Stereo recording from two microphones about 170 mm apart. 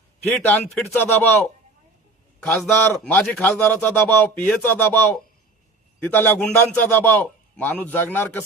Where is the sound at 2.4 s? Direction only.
Centre (ahead or behind).